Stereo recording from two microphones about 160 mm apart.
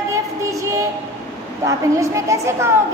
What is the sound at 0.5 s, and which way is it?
A woman's voice, 20° right (ahead or behind).